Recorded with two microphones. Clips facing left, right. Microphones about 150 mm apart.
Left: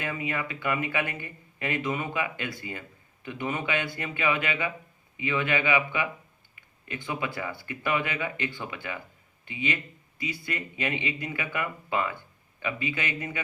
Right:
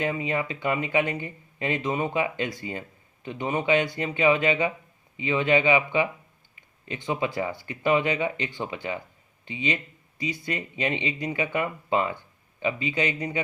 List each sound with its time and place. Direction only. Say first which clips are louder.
0.0 s speech: right 5 dB; 25° right (ahead or behind)